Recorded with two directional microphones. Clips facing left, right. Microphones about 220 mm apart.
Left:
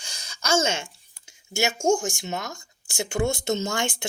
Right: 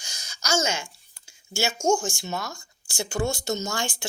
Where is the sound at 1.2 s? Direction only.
20° left (ahead or behind).